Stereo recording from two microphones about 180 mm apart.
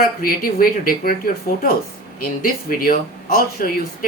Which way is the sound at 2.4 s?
55° left (ahead or behind).